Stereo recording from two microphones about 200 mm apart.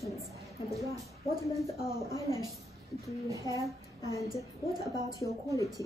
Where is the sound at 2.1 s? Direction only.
15° right (ahead or behind).